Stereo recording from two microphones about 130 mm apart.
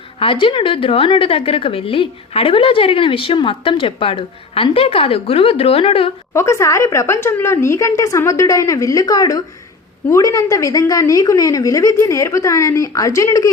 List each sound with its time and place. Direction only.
0.2 s a woman's voice: 40° left (ahead or behind)
6.3 s a woman's voice: 20° left (ahead or behind)